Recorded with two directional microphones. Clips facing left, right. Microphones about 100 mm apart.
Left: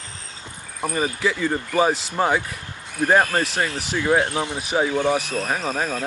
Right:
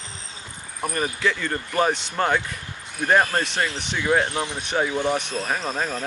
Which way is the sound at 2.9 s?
15° left (ahead or behind).